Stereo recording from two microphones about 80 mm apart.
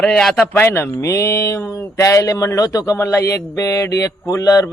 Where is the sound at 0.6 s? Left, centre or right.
Left.